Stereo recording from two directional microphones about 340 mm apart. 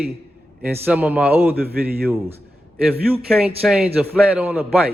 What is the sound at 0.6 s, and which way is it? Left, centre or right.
Speech, centre.